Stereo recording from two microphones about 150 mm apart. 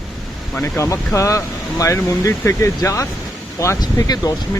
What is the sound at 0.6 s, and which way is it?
Speech, 20° left (ahead or behind).